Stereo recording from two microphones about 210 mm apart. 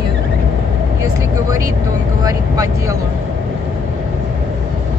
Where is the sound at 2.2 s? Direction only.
15° right (ahead or behind).